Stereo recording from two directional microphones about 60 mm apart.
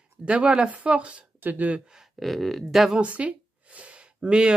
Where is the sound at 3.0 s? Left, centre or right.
Right.